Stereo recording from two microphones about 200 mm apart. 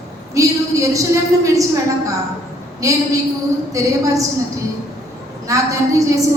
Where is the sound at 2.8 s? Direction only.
15° right (ahead or behind).